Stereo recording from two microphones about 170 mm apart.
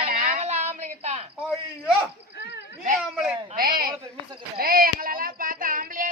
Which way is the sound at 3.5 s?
60° right (ahead or behind).